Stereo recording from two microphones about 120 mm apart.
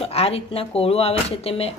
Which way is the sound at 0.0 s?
55° left (ahead or behind).